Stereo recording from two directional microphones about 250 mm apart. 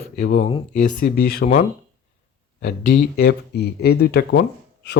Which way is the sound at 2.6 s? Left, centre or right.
Left.